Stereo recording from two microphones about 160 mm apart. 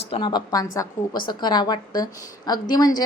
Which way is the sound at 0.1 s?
30° left (ahead or behind).